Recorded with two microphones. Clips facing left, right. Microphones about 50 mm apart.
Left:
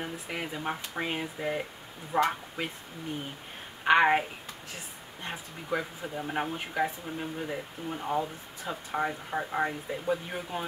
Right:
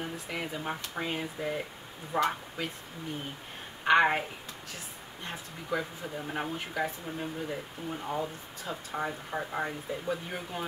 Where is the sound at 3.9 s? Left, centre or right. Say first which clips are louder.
Left 2 dB; centre.